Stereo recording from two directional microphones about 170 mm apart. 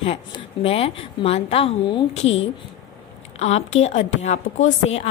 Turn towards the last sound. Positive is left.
turn(degrees=40)  # may be behind; listen again after turning